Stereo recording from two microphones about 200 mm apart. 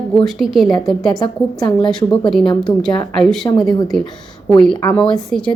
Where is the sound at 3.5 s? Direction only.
20° left (ahead or behind).